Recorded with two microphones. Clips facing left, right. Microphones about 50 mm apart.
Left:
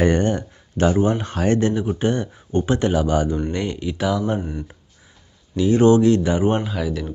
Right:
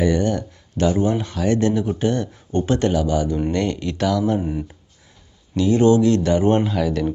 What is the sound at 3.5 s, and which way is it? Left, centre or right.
Speech, centre.